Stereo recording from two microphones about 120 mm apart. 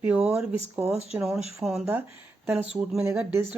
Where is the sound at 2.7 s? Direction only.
5° right (ahead or behind).